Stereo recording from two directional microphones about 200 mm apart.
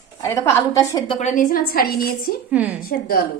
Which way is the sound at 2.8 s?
50° left (ahead or behind).